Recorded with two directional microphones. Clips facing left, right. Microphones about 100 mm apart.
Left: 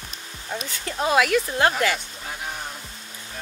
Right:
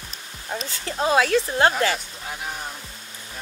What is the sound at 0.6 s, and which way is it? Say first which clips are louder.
Speech: right 1 dB; 35° right (ahead or behind).